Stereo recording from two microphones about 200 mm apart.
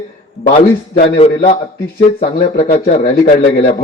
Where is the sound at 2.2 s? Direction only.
30° left (ahead or behind).